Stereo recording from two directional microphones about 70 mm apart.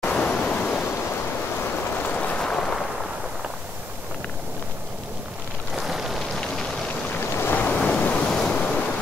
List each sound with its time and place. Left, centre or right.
0.1 s waves: centre
2.1 s a sound: centre
5.8 s rain on surface: centre
7.4 s waves: left
8.3 s waves: centre